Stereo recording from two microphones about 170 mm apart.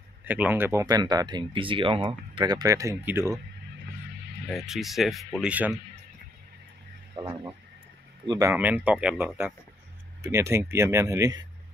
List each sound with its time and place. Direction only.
0.2 s speech: 10° right (ahead or behind)
4.5 s speech: centre (ahead or behind)
7.2 s speech: 25° right (ahead or behind)